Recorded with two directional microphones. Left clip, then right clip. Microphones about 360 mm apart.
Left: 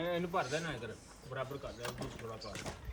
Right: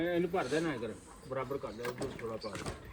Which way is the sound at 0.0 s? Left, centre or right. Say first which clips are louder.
Right 3 dB; centre.